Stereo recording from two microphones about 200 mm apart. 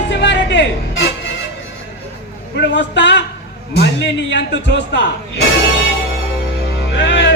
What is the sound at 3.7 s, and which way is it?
Music, 60° left (ahead or behind).